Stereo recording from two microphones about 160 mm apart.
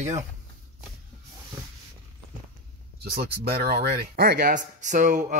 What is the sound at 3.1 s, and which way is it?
Speech, 75° right (ahead or behind).